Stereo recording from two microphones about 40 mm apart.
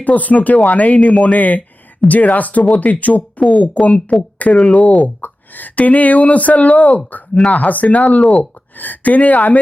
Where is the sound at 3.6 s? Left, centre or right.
Left.